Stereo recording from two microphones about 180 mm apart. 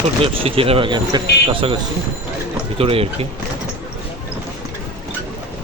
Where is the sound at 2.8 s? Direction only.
30° right (ahead or behind).